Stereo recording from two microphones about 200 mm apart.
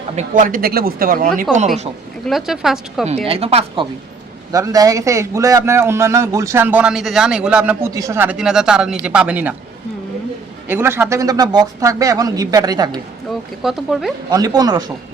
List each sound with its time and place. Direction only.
0.2 s speech: 40° right (ahead or behind)
2.2 s a woman's voice: centre (ahead or behind)
3.2 s a woman's voice: 30° right (ahead or behind)
4.5 s a man's voice: 15° right (ahead or behind)
10.7 s a man's voice: 10° right (ahead or behind)
13.6 s a woman's voice: centre (ahead or behind)
14.3 s a woman's voice: 20° right (ahead or behind)